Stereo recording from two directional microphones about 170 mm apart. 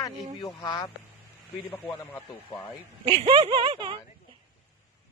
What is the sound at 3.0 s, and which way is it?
Speech, 30° right (ahead or behind).